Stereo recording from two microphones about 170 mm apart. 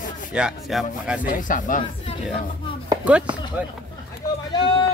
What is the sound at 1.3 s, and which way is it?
Speech, 50° left (ahead or behind).